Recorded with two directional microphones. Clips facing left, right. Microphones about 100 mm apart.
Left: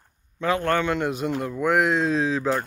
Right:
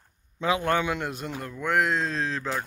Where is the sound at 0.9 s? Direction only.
Centre (ahead or behind).